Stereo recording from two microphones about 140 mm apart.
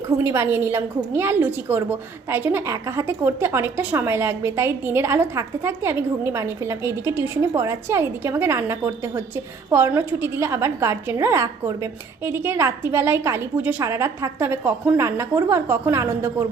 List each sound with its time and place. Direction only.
0.2 s a woman's voice: 20° right (ahead or behind)